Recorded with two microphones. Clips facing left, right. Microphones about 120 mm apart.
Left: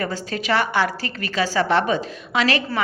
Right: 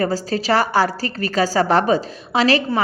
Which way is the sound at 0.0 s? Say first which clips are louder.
Right 6 dB; 35° right (ahead or behind).